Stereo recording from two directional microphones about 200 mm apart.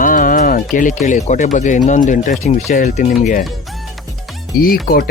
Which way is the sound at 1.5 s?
40° left (ahead or behind).